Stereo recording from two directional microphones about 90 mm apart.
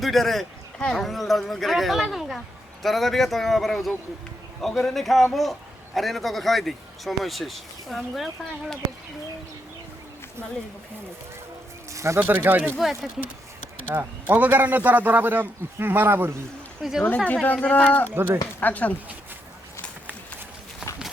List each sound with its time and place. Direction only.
0.0 s a man's voice: centre (ahead or behind)
11.9 s speech: 30° right (ahead or behind)
12.2 s speech: 20° right (ahead or behind)
12.8 s a man's voice: centre (ahead or behind)
13.8 s speech: 25° right (ahead or behind)
16.8 s a man's voice: 5° right (ahead or behind)
17.4 s speech: 15° left (ahead or behind)
18.1 s speech: 20° right (ahead or behind)
18.6 s speech: 15° left (ahead or behind)